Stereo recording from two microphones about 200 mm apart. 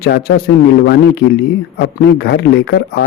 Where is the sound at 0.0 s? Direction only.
50° left (ahead or behind).